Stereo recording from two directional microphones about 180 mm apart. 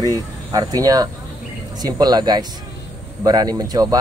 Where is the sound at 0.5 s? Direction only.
20° right (ahead or behind).